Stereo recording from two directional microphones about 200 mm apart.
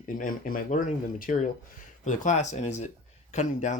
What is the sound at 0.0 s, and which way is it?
Speech, 40° left (ahead or behind).